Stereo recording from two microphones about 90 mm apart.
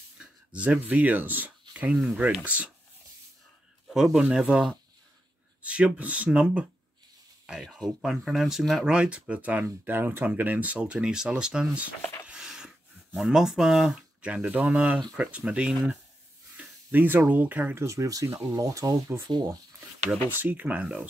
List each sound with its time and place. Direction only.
0.2 s speech: 15° right (ahead or behind)
3.9 s speech: 5° right (ahead or behind)
12.3 s a sound: 10° right (ahead or behind)
15.1 s speech: 10° right (ahead or behind)
16.5 s a sound: 20° right (ahead or behind)
17.3 s speech: 20° right (ahead or behind)
17.8 s speech: 35° right (ahead or behind)
20.2 s speech: 20° right (ahead or behind)